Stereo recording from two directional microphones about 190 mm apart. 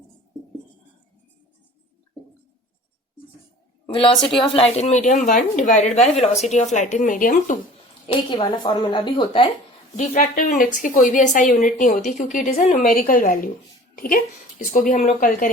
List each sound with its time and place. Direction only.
3.8 s a woman's voice: 25° left (ahead or behind); by 7.6 s 45° left (ahead or behind)
8.0 s speech: 30° left (ahead or behind)
10.0 s a woman's voice: 40° left (ahead or behind)